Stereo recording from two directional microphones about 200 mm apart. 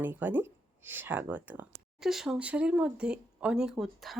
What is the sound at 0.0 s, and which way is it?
Speech, 10° right (ahead or behind).